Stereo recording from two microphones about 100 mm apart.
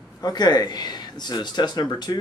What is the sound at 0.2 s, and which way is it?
Speech, 45° left (ahead or behind).